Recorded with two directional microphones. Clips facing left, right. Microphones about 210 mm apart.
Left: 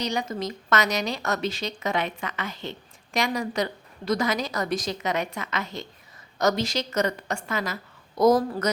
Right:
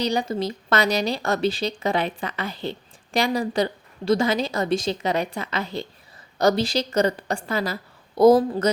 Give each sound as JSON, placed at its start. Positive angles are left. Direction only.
{"t": 0.0, "sound": "a woman's voice", "side_deg": -30}